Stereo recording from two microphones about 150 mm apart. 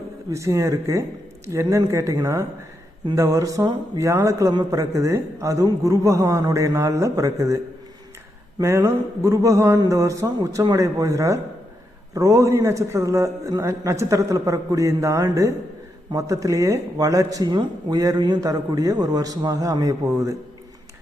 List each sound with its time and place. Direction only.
0.3 s a man's voice: 20° right (ahead or behind)
8.6 s a man's voice: 20° right (ahead or behind)